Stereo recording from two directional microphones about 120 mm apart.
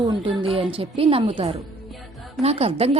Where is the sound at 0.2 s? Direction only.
45° right (ahead or behind).